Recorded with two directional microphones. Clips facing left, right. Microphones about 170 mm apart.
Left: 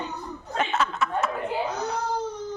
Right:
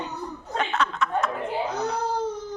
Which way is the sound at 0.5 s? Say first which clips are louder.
Even; 5° left (ahead or behind).